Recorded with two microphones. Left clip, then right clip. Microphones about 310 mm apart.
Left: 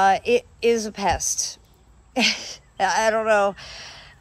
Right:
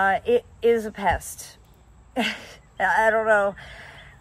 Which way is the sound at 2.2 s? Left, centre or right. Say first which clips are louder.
Left 7 dB; centre.